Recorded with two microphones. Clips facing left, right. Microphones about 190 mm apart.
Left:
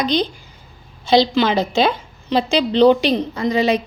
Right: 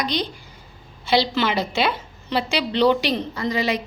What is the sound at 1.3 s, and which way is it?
A woman's voice, 20° left (ahead or behind).